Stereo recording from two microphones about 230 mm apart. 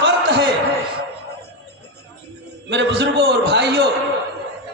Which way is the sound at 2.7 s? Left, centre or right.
Right.